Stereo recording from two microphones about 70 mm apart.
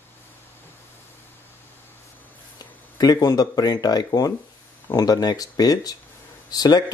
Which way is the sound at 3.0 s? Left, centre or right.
Left.